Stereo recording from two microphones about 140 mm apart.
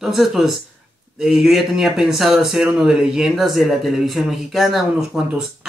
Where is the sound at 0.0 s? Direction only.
Centre (ahead or behind).